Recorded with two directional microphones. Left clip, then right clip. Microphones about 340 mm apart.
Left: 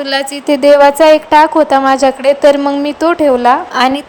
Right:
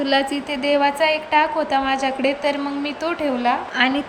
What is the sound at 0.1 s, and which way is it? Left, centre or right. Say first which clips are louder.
Speech: left 9 dB; centre.